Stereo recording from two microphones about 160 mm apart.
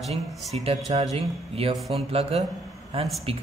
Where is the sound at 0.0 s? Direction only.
Centre (ahead or behind).